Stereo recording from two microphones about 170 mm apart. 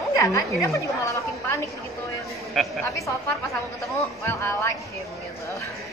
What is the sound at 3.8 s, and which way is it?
Speech, 15° left (ahead or behind).